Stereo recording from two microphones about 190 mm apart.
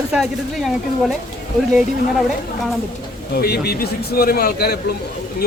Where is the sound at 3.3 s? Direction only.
55° left (ahead or behind).